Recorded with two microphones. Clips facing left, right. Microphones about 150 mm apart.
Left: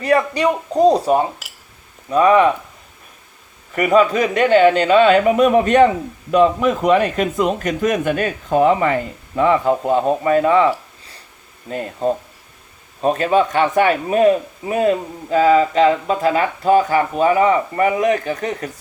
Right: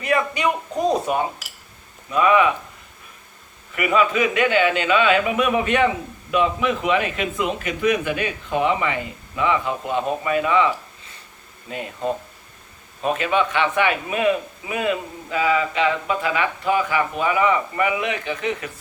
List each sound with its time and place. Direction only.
0.0 s a man's voice: 35° left (ahead or behind)
3.8 s a man's voice: 40° left (ahead or behind)
11.7 s a man's voice: 40° left (ahead or behind)